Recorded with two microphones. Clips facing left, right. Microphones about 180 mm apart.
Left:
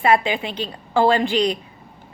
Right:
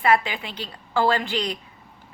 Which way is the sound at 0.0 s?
20° left (ahead or behind).